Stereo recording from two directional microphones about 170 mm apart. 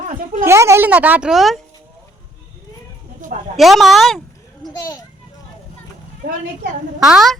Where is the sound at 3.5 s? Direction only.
Centre (ahead or behind).